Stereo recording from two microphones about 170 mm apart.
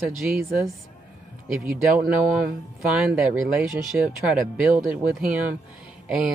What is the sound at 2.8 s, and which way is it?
Speech, centre (ahead or behind).